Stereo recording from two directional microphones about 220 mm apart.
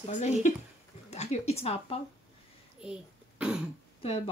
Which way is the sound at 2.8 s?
5° right (ahead or behind).